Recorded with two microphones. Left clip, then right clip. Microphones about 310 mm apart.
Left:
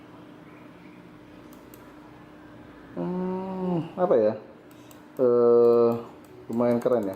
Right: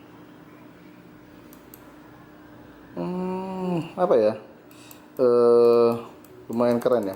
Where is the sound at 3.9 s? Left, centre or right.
Centre.